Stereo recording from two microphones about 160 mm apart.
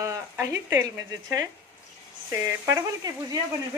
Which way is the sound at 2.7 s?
20° right (ahead or behind).